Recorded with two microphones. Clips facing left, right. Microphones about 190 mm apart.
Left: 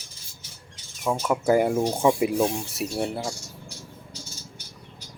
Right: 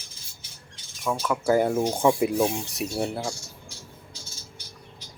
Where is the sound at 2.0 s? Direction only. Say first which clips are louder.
Even; 5° left (ahead or behind).